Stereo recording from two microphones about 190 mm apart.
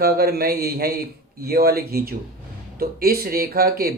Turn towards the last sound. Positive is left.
turn(degrees=-50)  # may be behind; listen again after turning